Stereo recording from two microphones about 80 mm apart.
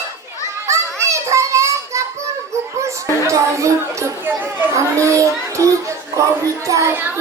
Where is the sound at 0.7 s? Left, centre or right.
Right.